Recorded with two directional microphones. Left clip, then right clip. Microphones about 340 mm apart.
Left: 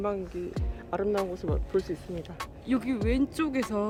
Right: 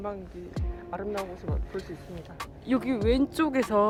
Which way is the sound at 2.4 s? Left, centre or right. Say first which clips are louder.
Right 3 dB; centre.